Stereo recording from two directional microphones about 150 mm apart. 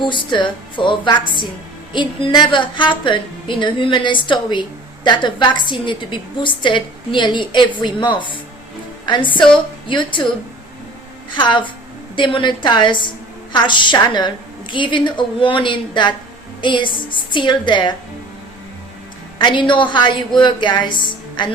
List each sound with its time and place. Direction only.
0.0 s a woman's voice: 30° left (ahead or behind)
11.3 s a woman's voice: 35° left (ahead or behind)
19.4 s a woman's voice: 30° left (ahead or behind)